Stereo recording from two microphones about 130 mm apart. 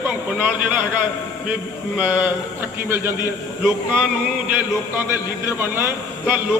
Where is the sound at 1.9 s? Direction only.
10° right (ahead or behind).